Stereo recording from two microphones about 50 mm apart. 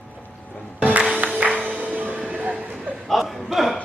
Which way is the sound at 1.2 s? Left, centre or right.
Right.